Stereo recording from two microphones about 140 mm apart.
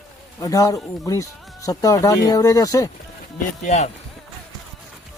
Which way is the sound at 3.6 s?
55° left (ahead or behind).